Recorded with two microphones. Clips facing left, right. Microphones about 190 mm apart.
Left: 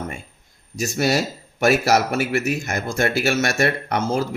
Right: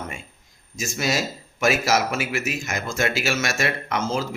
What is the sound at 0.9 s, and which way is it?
Speech, 60° left (ahead or behind).